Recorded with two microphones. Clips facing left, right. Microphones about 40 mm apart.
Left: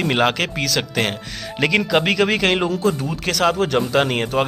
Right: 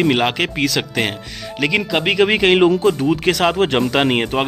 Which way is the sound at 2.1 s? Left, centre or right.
Right.